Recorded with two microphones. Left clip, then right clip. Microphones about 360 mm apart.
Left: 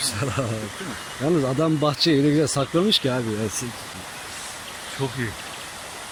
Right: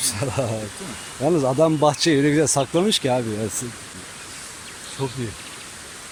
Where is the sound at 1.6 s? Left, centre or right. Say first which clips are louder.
Right 4 dB; centre.